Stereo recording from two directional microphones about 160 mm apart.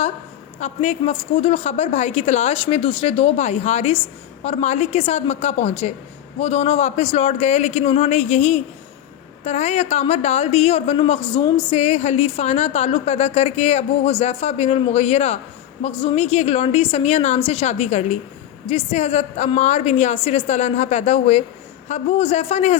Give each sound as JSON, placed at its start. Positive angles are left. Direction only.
{"t": 0.6, "sound": "a woman's voice", "side_deg": 45}